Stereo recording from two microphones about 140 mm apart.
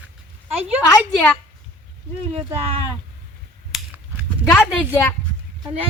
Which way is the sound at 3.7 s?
Centre (ahead or behind).